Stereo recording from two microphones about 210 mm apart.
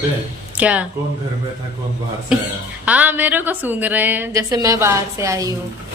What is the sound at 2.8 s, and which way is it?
A woman's voice, 5° right (ahead or behind).